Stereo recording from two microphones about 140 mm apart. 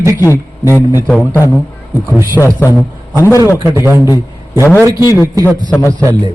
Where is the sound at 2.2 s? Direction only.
20° left (ahead or behind).